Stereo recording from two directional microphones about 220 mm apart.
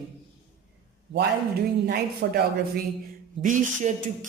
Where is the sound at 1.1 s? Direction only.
50° right (ahead or behind).